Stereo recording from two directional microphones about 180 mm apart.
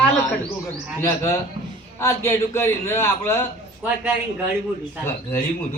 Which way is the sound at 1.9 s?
15° left (ahead or behind).